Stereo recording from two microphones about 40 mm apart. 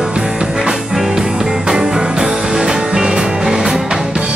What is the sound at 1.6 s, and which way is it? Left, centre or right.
Music, centre.